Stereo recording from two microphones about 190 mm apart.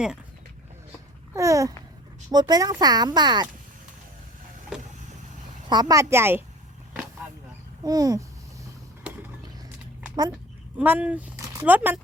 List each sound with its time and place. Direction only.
1.3 s speech: 15° right (ahead or behind)
4.7 s vehicle: 5° right (ahead or behind)
5.6 s speech: 20° right (ahead or behind)
7.9 s speech: 20° right (ahead or behind)
10.8 s speech: 10° right (ahead or behind)